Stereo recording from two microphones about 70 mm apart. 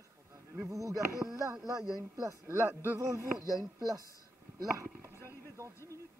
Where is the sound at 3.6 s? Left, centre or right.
Right.